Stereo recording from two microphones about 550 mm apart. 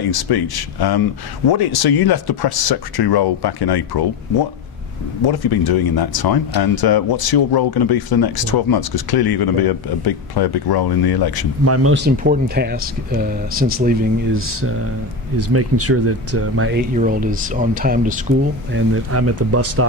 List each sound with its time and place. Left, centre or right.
0.1 s speech: left
11.6 s speech: right